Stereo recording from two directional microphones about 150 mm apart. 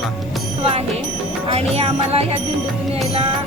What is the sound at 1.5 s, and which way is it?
Music, 40° right (ahead or behind).